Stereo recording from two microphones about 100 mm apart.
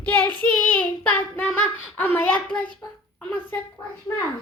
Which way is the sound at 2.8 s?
25° left (ahead or behind).